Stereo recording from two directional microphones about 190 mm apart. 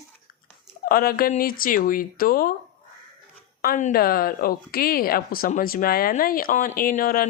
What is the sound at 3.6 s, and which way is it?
Speech, 45° left (ahead or behind).